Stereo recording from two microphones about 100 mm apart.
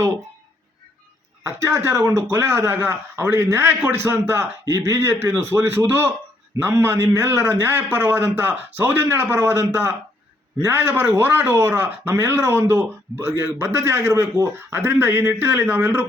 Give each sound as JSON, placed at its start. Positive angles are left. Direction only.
{"t": 1.5, "sound": "speech", "side_deg": -30}